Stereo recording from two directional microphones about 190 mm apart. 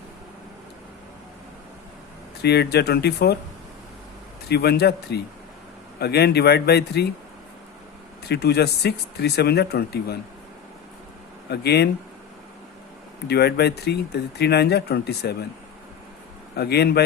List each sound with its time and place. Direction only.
2.4 s speech: 60° left (ahead or behind)
4.4 s speech: 60° left (ahead or behind)
8.2 s speech: 60° left (ahead or behind)
11.4 s speech: 60° left (ahead or behind)
13.2 s speech: 60° left (ahead or behind)
16.6 s speech: 60° left (ahead or behind)